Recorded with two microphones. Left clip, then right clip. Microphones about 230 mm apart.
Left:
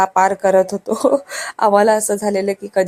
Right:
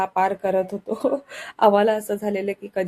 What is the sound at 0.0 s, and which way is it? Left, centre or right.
Speech, left.